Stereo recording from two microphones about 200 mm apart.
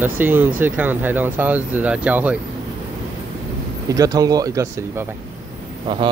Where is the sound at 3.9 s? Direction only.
20° right (ahead or behind).